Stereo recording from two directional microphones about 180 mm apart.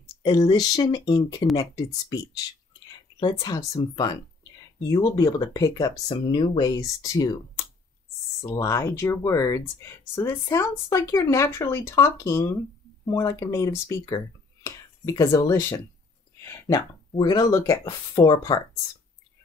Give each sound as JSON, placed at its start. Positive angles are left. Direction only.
{"t": 0.0, "sound": "speech", "side_deg": 20}
{"t": 17.1, "sound": "speech", "side_deg": 20}